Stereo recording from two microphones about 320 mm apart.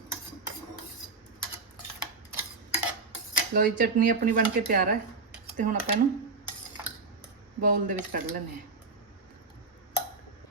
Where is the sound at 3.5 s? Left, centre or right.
Right.